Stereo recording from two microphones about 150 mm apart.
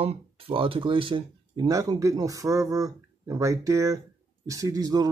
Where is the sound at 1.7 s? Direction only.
25° right (ahead or behind).